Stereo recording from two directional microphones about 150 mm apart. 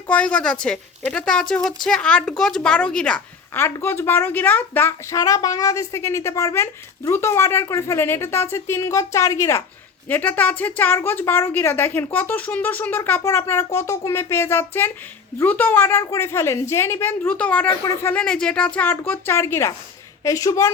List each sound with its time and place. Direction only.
0.1 s a woman's voice: 10° left (ahead or behind)